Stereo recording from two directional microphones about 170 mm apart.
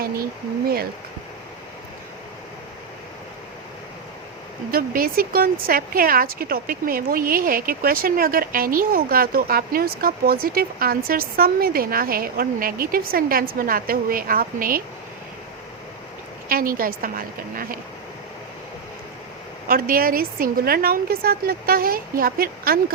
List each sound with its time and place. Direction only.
4.7 s speech: 60° right (ahead or behind)
16.5 s speech: 60° right (ahead or behind)
19.6 s speech: 60° right (ahead or behind)